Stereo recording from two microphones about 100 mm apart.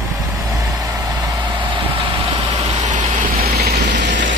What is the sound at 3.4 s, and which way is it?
Vehicle, 90° right.